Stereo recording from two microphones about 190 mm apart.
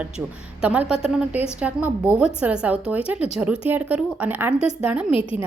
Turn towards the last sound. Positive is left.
turn(degrees=30)  # may be behind; listen again after turning